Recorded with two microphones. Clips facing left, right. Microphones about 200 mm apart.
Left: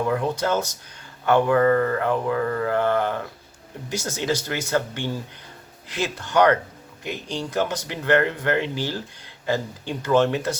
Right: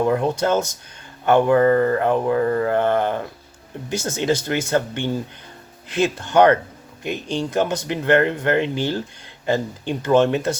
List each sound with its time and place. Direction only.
0.1 s mantra: 25° right (ahead or behind)